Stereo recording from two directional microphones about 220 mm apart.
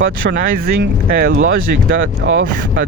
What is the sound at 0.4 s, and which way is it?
Speech, 45° right (ahead or behind).